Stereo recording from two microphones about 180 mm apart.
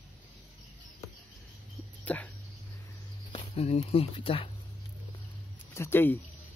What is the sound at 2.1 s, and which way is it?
Speech, 10° left (ahead or behind).